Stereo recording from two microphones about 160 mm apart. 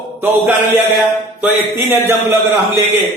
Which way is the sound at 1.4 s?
15° right (ahead or behind).